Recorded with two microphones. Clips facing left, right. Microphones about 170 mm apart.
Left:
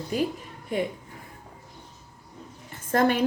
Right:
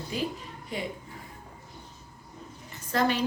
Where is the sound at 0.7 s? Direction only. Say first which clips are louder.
Left 7 dB; 50° left (ahead or behind).